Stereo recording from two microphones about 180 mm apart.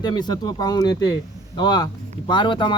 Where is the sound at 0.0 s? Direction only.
25° left (ahead or behind).